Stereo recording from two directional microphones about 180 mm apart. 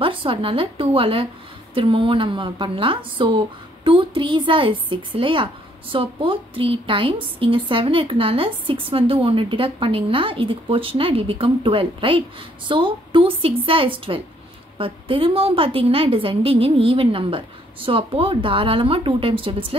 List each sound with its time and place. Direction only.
0.0 s a woman's voice: 30° right (ahead or behind)